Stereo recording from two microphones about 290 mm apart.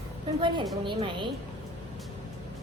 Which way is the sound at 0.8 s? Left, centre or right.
Centre.